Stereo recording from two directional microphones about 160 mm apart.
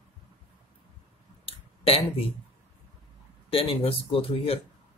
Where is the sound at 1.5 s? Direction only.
35° left (ahead or behind).